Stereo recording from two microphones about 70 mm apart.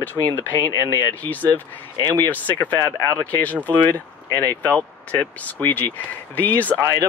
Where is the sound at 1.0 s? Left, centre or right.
Left.